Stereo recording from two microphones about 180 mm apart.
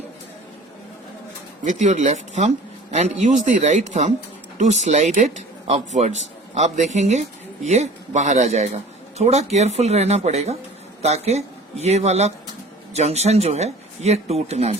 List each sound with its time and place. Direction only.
1.6 s a man's voice: 40° right (ahead or behind)